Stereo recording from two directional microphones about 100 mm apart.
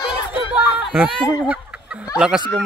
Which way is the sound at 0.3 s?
10° right (ahead or behind).